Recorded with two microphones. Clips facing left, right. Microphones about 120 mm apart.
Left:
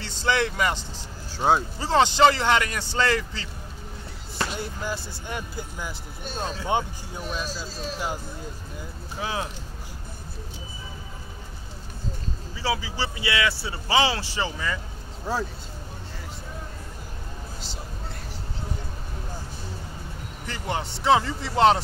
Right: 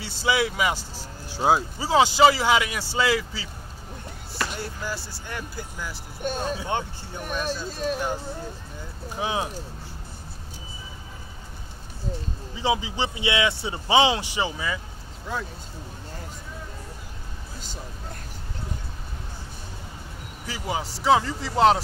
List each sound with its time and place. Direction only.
0.0 s speech: 10° right (ahead or behind)
4.4 s speech: 20° left (ahead or behind)
7.2 s speech: 55° right (ahead or behind)
9.2 s speech: 20° right (ahead or behind)
12.5 s speech: 20° right (ahead or behind)
15.3 s speech: 35° left (ahead or behind)
20.4 s speech: 5° right (ahead or behind)